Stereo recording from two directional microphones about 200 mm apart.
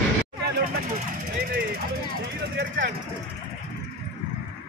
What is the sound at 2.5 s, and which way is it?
Speech, 55° right (ahead or behind).